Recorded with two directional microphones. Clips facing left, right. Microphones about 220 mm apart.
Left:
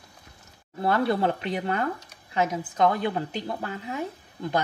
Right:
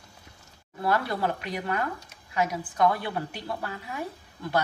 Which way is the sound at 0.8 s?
25° left (ahead or behind).